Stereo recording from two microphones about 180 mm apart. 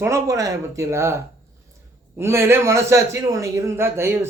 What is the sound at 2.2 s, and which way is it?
A man's voice, 15° right (ahead or behind).